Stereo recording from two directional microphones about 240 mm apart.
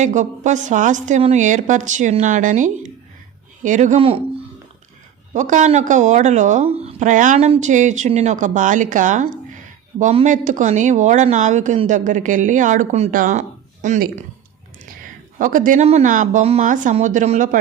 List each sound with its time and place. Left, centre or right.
0.0 s speech: right
5.3 s speech: right
15.4 s speech: right